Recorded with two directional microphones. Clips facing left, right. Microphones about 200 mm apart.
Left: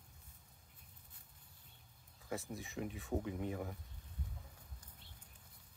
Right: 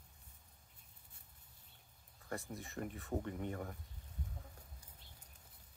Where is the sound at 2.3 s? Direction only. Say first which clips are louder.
Left 1 dB; centre (ahead or behind).